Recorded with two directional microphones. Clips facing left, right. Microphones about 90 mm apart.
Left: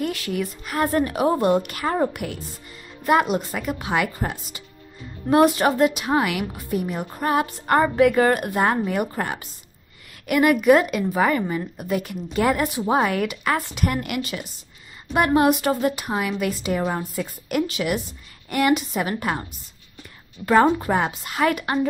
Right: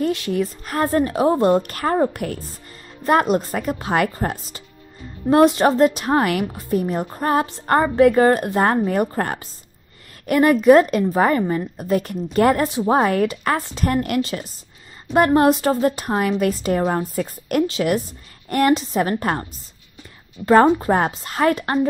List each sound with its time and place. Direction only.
0.0 s a woman's voice: 30° right (ahead or behind)
20.4 s a woman's voice: 30° right (ahead or behind)